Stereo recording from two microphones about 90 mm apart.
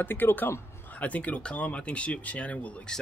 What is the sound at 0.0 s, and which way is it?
Speech, 20° left (ahead or behind).